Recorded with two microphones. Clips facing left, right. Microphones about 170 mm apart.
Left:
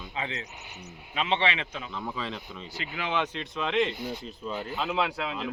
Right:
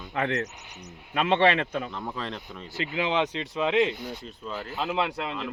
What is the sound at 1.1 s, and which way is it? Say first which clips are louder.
Speech: right 6 dB; 55° right (ahead or behind).